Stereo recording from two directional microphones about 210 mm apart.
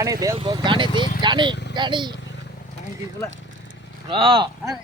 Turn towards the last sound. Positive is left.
turn(degrees=-25)  # may be behind; listen again after turning